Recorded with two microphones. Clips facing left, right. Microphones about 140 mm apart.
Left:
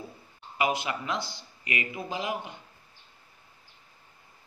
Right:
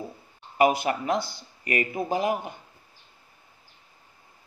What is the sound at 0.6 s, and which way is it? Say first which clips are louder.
Speech: right 7 dB; 45° right (ahead or behind).